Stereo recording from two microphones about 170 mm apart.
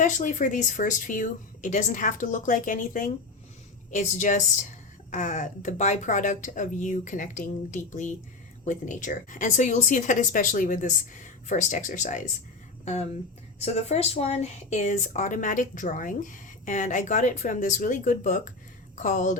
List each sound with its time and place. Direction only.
0.0 s speech: 50° left (ahead or behind)